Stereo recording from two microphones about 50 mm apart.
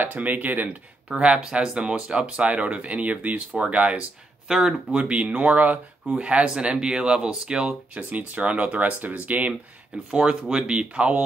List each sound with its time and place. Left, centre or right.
0.0 s speech: right
1.2 s speech: centre
4.5 s speech: centre
4.9 s speech: right
7.9 s speech: right